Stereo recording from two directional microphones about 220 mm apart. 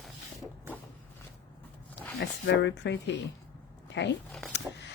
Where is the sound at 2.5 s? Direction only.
55° left (ahead or behind).